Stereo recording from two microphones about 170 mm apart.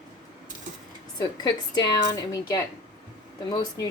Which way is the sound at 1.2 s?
25° left (ahead or behind).